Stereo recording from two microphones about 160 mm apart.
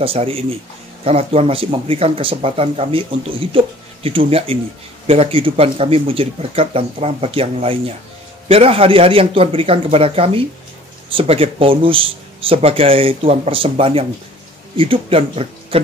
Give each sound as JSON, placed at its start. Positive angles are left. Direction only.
{"t": 0.0, "sound": "speech", "side_deg": -35}